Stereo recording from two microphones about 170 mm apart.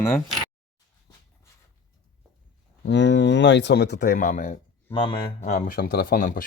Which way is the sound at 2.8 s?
90° left.